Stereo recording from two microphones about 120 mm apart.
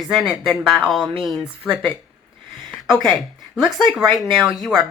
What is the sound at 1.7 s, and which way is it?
Speech, 10° left (ahead or behind).